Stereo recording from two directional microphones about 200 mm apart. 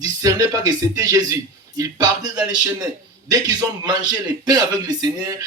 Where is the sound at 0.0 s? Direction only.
15° right (ahead or behind).